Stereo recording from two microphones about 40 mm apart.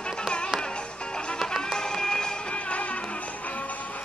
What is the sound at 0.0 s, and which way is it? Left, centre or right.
Music, left.